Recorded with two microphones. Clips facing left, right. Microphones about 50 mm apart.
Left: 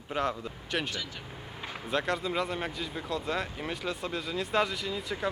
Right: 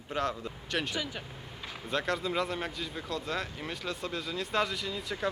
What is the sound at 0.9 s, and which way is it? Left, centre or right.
Speech, centre.